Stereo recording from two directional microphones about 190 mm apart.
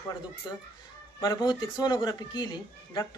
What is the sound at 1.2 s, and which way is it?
Speech, 20° left (ahead or behind).